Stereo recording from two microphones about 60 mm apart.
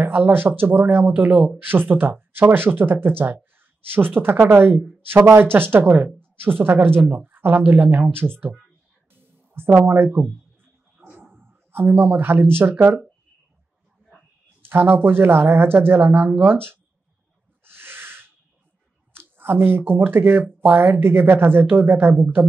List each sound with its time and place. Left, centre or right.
0.0 s speech: right
9.1 s a sound: right
9.8 s speech: right
11.0 s dog: right
11.3 s speech: right
14.6 s speech: right
17.6 s a sound: right
19.1 s speech: right